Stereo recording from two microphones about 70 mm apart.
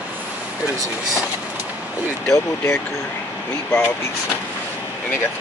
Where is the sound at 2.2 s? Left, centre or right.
Left.